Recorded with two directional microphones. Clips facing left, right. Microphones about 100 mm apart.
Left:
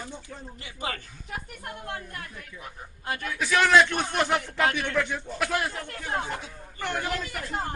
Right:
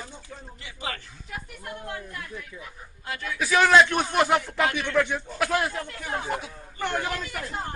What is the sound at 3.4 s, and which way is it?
A man's voice, 10° right (ahead or behind).